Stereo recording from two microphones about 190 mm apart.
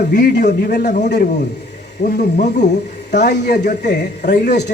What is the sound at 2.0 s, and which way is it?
Speech, 65° left (ahead or behind).